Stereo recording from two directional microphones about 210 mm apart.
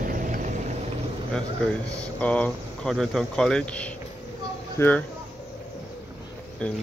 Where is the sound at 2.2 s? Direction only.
5° left (ahead or behind).